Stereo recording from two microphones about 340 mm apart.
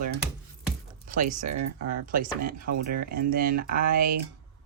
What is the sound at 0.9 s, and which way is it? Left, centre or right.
Music, right.